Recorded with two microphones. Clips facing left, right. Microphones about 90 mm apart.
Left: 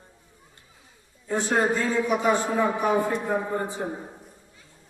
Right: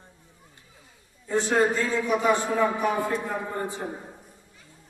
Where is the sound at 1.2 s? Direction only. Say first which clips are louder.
Right 1 dB; 10° left (ahead or behind).